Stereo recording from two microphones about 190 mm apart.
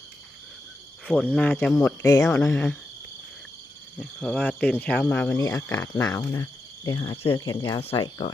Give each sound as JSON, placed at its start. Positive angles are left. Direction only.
{"t": 1.0, "sound": "speech", "side_deg": 5}
{"t": 4.0, "sound": "speech", "side_deg": 5}